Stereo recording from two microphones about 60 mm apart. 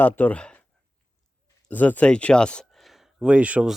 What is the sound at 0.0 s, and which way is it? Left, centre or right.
Speech, left.